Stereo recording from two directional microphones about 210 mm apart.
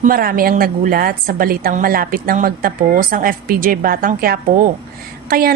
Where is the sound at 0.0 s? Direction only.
45° right (ahead or behind).